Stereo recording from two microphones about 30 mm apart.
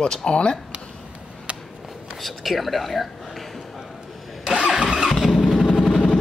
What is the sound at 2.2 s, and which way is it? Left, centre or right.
Speech, centre.